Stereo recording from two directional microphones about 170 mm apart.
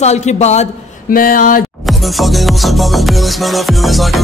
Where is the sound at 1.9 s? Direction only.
Centre (ahead or behind).